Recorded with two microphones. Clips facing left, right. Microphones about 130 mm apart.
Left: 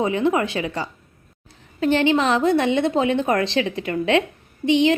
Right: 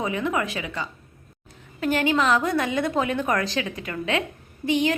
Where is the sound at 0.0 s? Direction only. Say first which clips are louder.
Left 6 dB; 30° left (ahead or behind).